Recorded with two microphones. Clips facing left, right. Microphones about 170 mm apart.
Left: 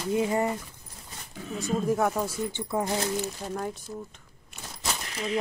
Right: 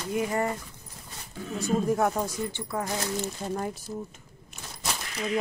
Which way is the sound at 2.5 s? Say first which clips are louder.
Left 3 dB; 20° left (ahead or behind).